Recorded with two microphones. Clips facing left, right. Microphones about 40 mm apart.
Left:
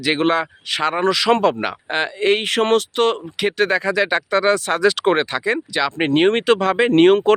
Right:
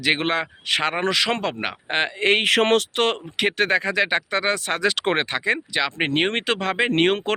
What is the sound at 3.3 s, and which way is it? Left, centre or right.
Speech, right.